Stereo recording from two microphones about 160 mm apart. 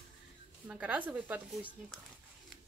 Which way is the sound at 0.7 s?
10° right (ahead or behind).